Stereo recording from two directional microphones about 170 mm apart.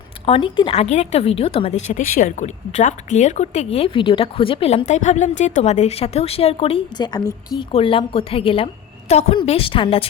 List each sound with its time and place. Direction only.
0.3 s speech: 30° left (ahead or behind)
2.1 s speech: 50° left (ahead or behind); by 10.1 s 30° left (ahead or behind)